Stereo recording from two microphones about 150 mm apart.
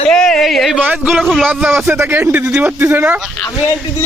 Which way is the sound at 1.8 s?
15° right (ahead or behind).